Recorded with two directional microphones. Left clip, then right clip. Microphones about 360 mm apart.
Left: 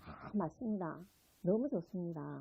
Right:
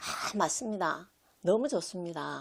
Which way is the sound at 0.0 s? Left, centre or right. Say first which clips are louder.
Right 11 dB; centre.